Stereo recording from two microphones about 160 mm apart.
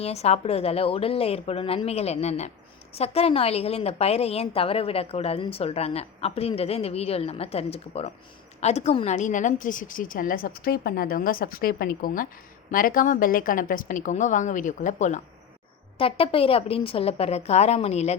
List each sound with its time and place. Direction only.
0.0 s a woman's voice: 40° left (ahead or behind)
16.0 s a woman's voice: 35° left (ahead or behind)